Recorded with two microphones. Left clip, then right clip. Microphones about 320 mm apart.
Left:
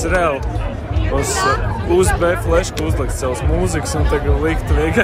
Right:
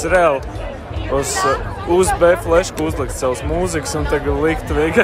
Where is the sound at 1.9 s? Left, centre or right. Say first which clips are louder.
Right 3 dB; centre.